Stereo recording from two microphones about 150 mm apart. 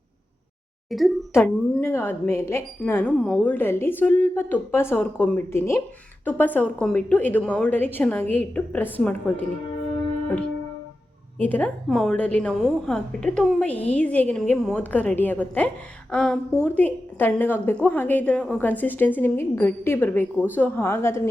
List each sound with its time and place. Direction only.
0.9 s a woman's voice: centre (ahead or behind)
1.3 s a woman's voice: 15° left (ahead or behind)
11.3 s a woman's voice: 10° left (ahead or behind)